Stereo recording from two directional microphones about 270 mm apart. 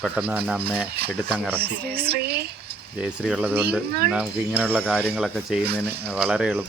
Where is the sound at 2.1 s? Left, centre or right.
Right.